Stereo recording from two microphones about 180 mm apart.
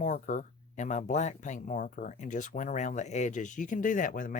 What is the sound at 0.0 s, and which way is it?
Speech, 45° left (ahead or behind).